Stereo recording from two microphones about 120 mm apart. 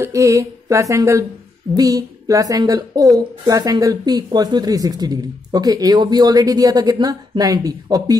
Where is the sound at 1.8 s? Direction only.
30° right (ahead or behind).